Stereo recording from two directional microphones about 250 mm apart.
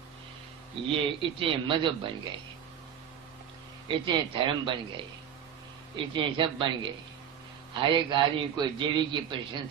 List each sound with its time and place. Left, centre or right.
0.8 s a man's voice: right
3.9 s a man's voice: centre